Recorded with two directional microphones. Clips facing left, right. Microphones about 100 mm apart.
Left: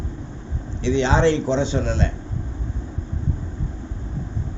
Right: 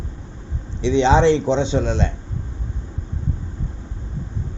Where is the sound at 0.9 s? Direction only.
20° right (ahead or behind).